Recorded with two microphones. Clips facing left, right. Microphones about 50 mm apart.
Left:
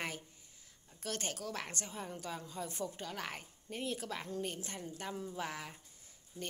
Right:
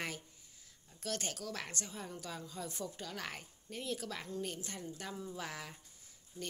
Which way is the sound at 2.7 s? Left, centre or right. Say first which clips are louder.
Left 2 dB; left.